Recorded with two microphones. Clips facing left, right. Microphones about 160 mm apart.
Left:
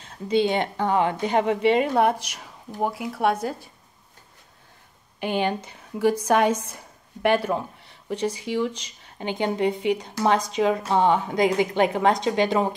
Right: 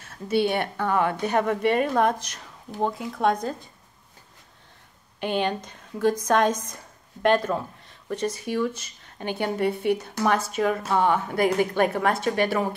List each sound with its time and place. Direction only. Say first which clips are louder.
0.0 s a woman's voice: left 1 dB; 15° left (ahead or behind)
5.2 s a woman's voice: left 1 dB; 10° left (ahead or behind)